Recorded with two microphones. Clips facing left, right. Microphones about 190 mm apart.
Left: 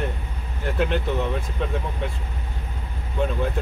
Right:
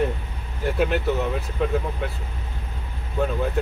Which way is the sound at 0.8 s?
5° right (ahead or behind).